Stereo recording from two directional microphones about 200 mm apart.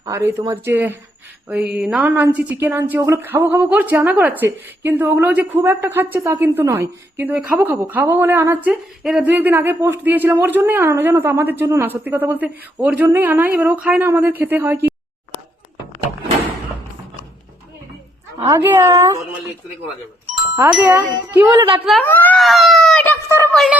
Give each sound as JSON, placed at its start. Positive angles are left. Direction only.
{"t": 0.0, "sound": "a woman's voice", "side_deg": -15}
{"t": 18.4, "sound": "a woman's voice", "side_deg": -10}
{"t": 20.7, "sound": "speech", "side_deg": -5}
{"t": 21.3, "sound": "a woman's voice", "side_deg": -20}
{"t": 21.8, "sound": "a sound", "side_deg": 5}